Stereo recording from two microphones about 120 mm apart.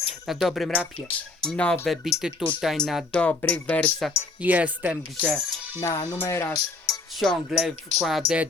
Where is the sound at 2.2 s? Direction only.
5° right (ahead or behind); by 4.2 s 10° left (ahead or behind).